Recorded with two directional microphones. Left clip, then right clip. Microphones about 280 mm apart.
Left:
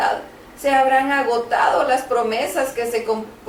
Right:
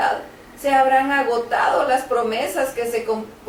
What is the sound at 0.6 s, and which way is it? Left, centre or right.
Speech, centre.